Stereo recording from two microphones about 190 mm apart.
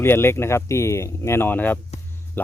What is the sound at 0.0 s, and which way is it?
Speech, 10° left (ahead or behind).